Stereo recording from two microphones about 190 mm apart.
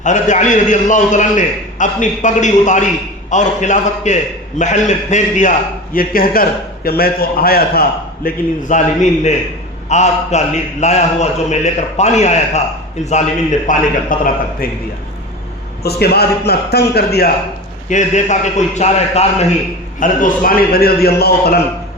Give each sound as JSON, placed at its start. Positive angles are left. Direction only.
{"t": 0.0, "sound": "a man's voice", "side_deg": 40}
{"t": 8.7, "sound": "a man's voice", "side_deg": 40}
{"t": 13.7, "sound": "a man's voice", "side_deg": 40}
{"t": 15.8, "sound": "a man's voice", "side_deg": 55}
{"t": 17.8, "sound": "a man's voice", "side_deg": 40}
{"t": 20.0, "sound": "a man's voice", "side_deg": 45}